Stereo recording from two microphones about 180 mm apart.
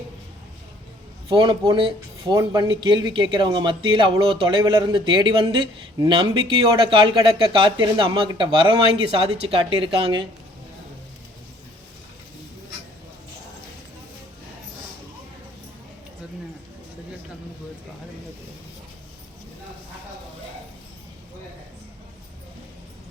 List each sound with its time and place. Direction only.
1.3 s speech: 30° right (ahead or behind)